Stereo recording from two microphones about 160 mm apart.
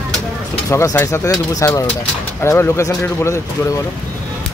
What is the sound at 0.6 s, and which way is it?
Speech, 20° left (ahead or behind).